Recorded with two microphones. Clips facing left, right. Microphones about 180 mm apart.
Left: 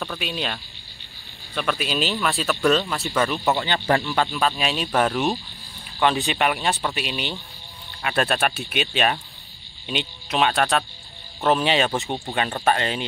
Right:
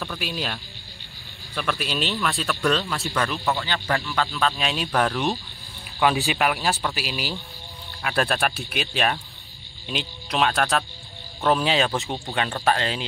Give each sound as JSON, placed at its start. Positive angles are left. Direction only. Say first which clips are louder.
{"t": 0.0, "sound": "speech", "louder": "left 1 dB", "side_deg": 0}
{"t": 3.4, "sound": "speech", "louder": "left 4 dB", "side_deg": 20}
{"t": 4.4, "sound": "speech", "louder": "left 1 dB", "side_deg": 5}